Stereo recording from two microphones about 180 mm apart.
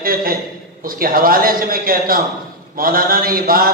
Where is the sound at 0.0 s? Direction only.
55° right (ahead or behind).